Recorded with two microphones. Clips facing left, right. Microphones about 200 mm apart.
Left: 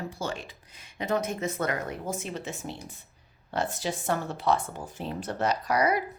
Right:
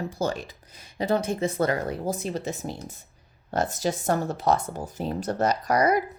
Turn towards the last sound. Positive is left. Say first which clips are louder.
# right 3 dB
turn(degrees=-45)  # may be behind; listen again after turning